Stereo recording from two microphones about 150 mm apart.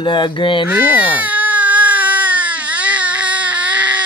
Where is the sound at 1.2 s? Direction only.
10° right (ahead or behind).